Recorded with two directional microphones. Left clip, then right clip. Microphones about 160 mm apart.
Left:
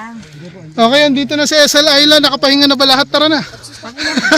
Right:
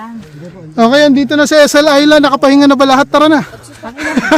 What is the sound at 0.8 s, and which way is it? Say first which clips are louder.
Speech: right 2 dB; 35° right (ahead or behind).